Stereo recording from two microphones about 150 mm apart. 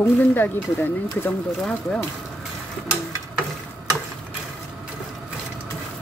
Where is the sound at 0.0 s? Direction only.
15° left (ahead or behind).